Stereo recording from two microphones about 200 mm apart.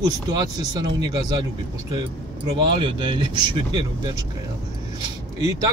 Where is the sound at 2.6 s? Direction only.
25° right (ahead or behind).